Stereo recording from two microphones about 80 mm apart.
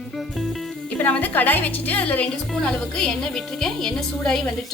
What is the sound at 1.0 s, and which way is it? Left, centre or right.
A woman's voice, left.